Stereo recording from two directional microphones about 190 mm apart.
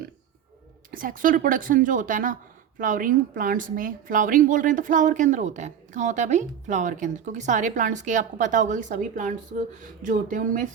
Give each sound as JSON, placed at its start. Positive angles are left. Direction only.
{"t": 0.9, "sound": "speech", "side_deg": -45}